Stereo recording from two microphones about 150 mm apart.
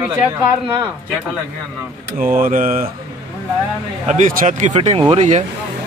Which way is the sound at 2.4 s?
65° right (ahead or behind).